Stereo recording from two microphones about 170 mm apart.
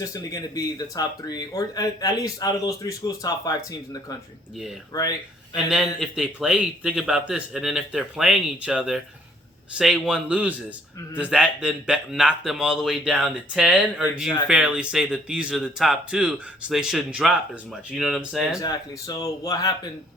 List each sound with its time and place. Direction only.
0.0 s speech: 20° left (ahead or behind)
4.9 s speech: 20° left (ahead or behind)
5.5 s a man's voice: 5° right (ahead or behind)
18.6 s speech: 20° left (ahead or behind)